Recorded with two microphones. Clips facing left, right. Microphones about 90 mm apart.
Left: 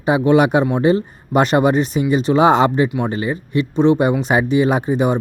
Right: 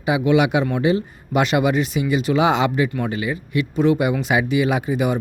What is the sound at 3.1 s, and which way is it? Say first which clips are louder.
Speech: left 3 dB; 35° left (ahead or behind).